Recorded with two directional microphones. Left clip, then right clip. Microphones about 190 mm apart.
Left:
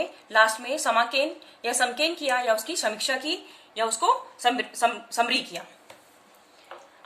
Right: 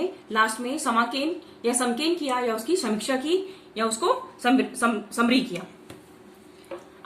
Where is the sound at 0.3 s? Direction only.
55° left (ahead or behind).